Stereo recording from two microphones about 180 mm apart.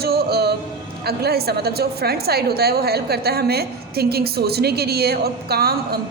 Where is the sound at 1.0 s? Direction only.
60° right (ahead or behind).